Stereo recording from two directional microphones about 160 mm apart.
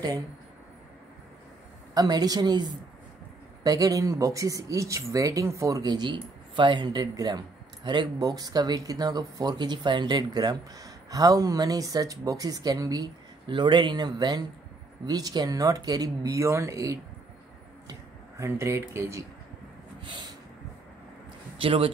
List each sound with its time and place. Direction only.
2.0 s speech: 25° right (ahead or behind)
3.6 s speech: 20° right (ahead or behind)
18.4 s speech: 20° right (ahead or behind)
21.5 s speech: 35° right (ahead or behind)